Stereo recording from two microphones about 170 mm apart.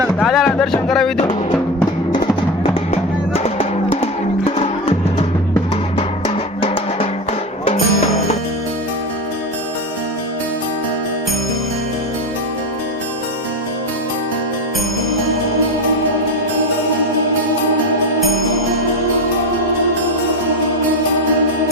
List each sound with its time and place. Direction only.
0.2 s speech: centre (ahead or behind)
2.9 s music: 35° left (ahead or behind)
6.0 s music: 30° left (ahead or behind)